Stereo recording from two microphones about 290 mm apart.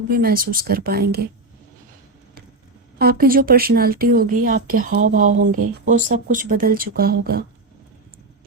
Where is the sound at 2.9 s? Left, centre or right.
Right.